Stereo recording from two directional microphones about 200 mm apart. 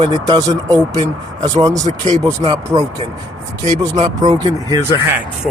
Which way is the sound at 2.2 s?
15° right (ahead or behind).